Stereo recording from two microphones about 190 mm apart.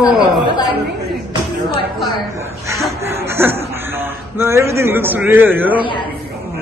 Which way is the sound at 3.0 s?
15° right (ahead or behind).